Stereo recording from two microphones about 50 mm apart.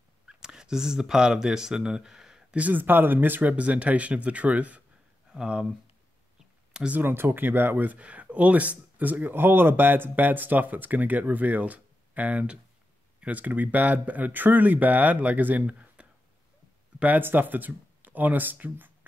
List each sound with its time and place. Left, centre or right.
0.3 s speech: centre
2.5 s speech: right
5.3 s speech: centre
7.0 s speech: right
17.2 s speech: right